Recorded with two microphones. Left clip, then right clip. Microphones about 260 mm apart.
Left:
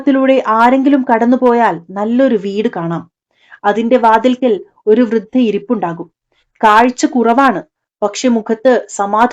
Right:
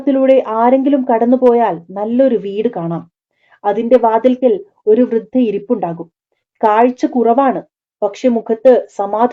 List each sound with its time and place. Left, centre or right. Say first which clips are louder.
0.0 s speech: even; left